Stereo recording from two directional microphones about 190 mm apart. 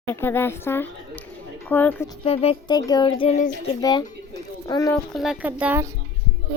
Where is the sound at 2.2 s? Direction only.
30° left (ahead or behind).